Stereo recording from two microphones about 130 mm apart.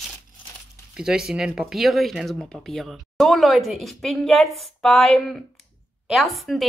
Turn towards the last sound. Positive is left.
turn(degrees=0)  # may be behind; listen again after turning